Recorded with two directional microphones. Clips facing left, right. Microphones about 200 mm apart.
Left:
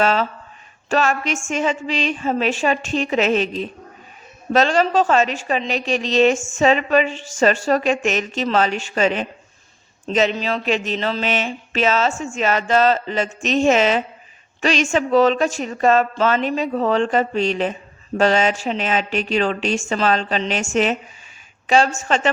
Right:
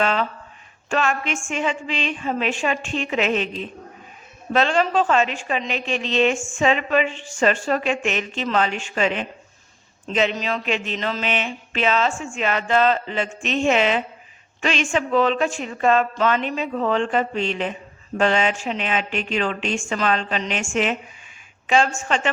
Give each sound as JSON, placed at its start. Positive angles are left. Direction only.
{"t": 0.0, "sound": "speech", "side_deg": 40}